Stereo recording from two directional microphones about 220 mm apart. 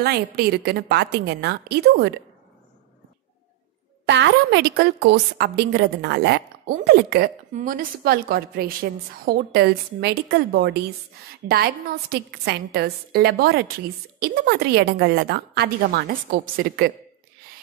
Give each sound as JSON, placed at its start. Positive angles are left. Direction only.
{"t": 0.0, "sound": "a woman's voice", "side_deg": -45}
{"t": 4.0, "sound": "a woman's voice", "side_deg": -50}